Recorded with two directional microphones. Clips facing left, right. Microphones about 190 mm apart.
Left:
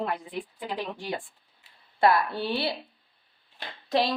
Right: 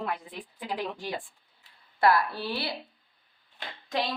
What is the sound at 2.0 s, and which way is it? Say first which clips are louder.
Speech: left 1 dB; 20° left (ahead or behind).